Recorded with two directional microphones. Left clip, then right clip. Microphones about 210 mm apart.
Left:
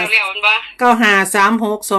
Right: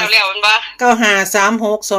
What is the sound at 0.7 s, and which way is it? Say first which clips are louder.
Speech: even; 5° left (ahead or behind).